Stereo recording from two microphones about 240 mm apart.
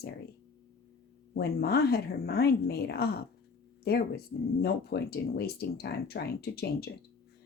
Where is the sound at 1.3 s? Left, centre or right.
Left.